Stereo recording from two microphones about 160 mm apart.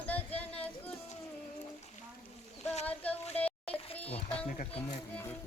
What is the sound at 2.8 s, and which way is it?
Speech, 10° left (ahead or behind).